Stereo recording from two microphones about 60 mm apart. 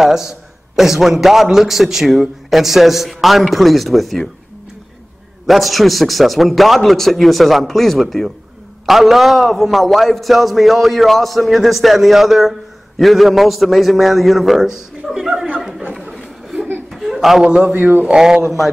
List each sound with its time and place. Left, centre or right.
0.0 s a man's voice: centre
5.5 s a man's voice: centre
16.9 s a sound: centre
17.5 s speech: centre
17.7 s speech: right
18.1 s speech: centre